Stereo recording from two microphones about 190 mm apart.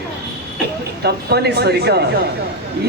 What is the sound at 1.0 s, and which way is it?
A man's voice, 60° right (ahead or behind).